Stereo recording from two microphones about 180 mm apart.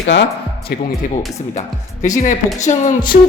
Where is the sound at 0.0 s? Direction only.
85° left.